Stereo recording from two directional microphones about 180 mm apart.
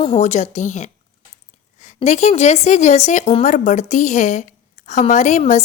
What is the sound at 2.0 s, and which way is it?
A woman's voice, 40° left (ahead or behind).